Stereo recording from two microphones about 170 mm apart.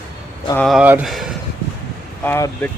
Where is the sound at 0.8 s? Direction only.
10° right (ahead or behind).